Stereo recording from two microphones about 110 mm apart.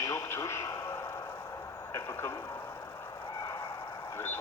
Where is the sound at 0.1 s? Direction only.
25° left (ahead or behind).